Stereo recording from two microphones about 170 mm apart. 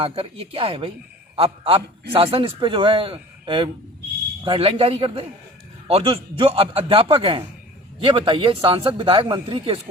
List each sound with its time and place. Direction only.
0.0 s a man's voice: 35° right (ahead or behind)